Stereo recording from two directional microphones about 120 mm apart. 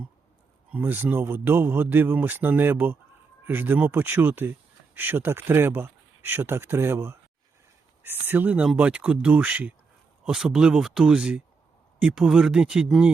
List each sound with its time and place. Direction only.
0.7 s a man's voice: 15° right (ahead or behind)